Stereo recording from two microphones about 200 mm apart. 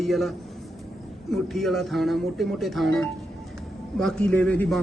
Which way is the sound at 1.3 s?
Centre (ahead or behind).